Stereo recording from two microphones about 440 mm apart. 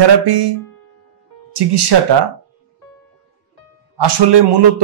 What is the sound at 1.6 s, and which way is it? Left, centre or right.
Speech, right.